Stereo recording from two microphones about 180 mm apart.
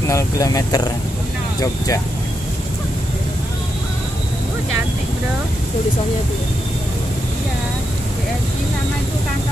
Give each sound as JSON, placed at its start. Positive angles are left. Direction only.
{"t": 0.1, "sound": "speech", "side_deg": 20}